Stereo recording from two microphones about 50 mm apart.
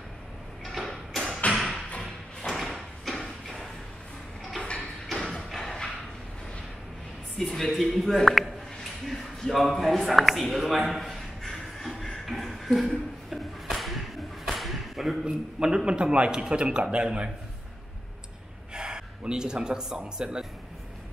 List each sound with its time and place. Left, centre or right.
0.7 s a sound: centre
1.5 s music: centre
2.4 s sliding door: centre
4.6 s a sound: left
5.3 s thump: centre
7.3 s a man's voice: centre
9.0 s a sound: centre
15.2 s a man's voice: centre
18.7 s speech: centre